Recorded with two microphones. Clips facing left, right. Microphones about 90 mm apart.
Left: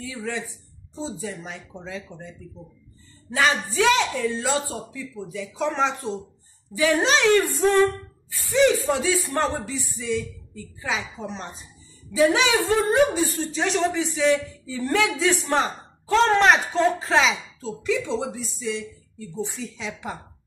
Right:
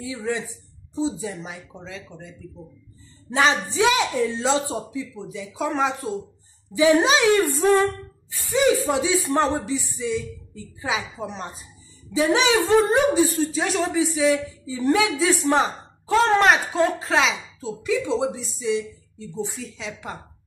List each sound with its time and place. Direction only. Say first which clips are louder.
0.0 s a woman's voice: right 3 dB; 15° right (ahead or behind)
1.9 s a woman's voice: left 4 dB; centre (ahead or behind)
3.3 s a man's voice: right 2 dB; 25° right (ahead or behind)
5.6 s a woman's voice: right 1 dB; 5° right (ahead or behind)
6.8 s a woman's voice: right 3 dB; 15° right (ahead or behind)
12.1 s a man's voice: even; 20° right (ahead or behind)
13.5 s a woman's voice: even; 5° right (ahead or behind)
17.6 s a woman's voice: right 1 dB; 15° right (ahead or behind)
19.6 s a woman's voice: left 1 dB; centre (ahead or behind)